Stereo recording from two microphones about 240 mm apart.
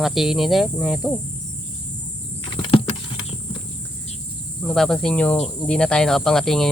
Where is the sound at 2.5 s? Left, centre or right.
Left.